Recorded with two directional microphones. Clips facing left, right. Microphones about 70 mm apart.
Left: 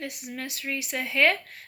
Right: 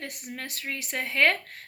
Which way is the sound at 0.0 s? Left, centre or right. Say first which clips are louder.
Left 2 dB; right.